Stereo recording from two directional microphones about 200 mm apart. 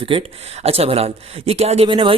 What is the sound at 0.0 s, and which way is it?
Speech, 25° right (ahead or behind).